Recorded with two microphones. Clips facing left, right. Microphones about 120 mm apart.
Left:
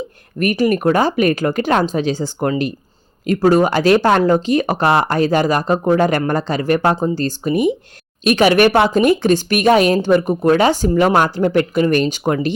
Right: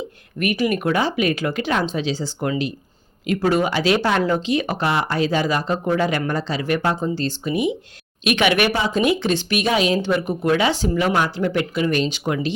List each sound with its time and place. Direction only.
0.3 s speech: 40° left (ahead or behind)